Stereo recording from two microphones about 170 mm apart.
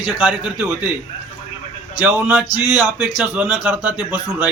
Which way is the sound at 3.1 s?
5° right (ahead or behind).